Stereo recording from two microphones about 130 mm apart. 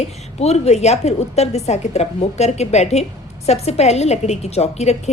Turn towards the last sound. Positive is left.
turn(degrees=55)  # may be behind; listen again after turning